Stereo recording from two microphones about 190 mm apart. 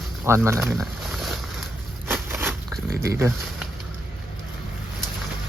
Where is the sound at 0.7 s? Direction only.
Centre (ahead or behind).